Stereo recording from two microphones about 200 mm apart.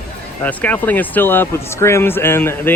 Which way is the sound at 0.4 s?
10° left (ahead or behind).